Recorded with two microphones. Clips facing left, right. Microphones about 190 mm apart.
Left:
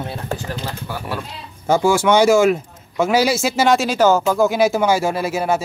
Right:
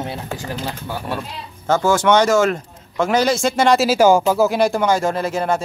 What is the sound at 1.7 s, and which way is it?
A man's voice, 10° left (ahead or behind).